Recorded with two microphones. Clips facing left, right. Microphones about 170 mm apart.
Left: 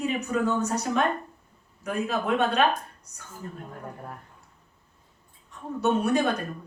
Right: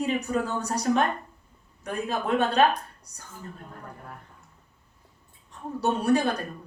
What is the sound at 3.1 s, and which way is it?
Speech, 35° right (ahead or behind).